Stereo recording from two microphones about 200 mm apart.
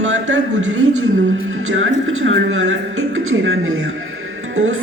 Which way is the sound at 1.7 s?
80° right.